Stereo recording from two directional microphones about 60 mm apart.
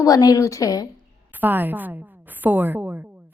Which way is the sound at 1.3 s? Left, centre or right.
Right.